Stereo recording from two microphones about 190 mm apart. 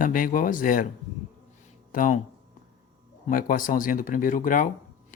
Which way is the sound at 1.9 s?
45° left (ahead or behind).